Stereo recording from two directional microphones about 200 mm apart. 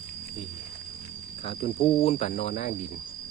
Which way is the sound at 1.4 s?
30° left (ahead or behind).